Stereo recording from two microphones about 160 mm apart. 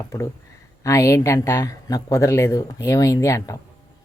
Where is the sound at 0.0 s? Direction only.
20° left (ahead or behind).